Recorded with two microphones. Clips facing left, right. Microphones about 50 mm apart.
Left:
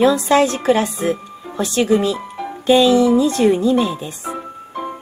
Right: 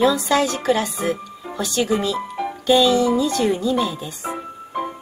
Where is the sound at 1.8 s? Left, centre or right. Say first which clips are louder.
Left 6 dB; centre.